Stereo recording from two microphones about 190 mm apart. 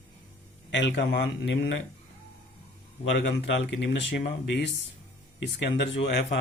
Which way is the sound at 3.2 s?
70° left (ahead or behind).